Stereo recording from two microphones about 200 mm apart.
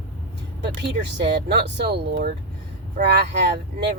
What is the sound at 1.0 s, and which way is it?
Speech, 55° right (ahead or behind).